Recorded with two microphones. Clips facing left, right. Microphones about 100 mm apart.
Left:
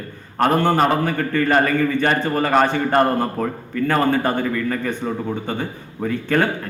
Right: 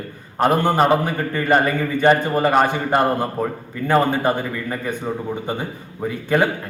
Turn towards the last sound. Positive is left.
turn(degrees=-15)  # may be behind; listen again after turning